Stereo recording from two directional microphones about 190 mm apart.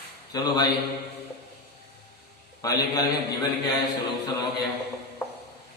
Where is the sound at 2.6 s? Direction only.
20° left (ahead or behind).